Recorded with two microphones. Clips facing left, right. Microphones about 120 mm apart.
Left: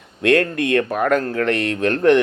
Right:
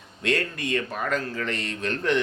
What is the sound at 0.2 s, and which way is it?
Speech, 60° left (ahead or behind).